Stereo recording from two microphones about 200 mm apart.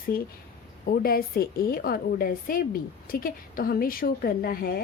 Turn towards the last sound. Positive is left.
turn(degrees=50)  # may be behind; listen again after turning